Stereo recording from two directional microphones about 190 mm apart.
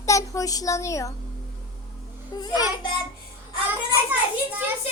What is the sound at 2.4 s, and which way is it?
Speech, 20° left (ahead or behind).